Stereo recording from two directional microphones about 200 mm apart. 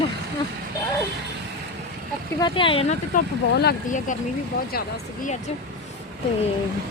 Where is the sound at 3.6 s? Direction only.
40° left (ahead or behind).